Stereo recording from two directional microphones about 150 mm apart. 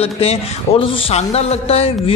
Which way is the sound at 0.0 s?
40° left (ahead or behind).